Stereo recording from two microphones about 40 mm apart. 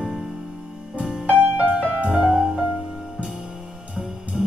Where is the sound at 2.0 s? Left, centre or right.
Centre.